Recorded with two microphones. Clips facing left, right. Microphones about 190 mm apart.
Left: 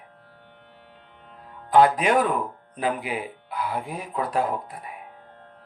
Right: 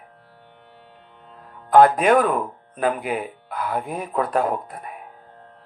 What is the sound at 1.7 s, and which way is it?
Speech, 50° right (ahead or behind).